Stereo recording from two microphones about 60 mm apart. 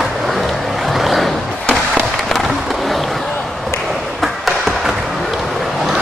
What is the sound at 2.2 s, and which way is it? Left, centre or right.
Skateboard, centre.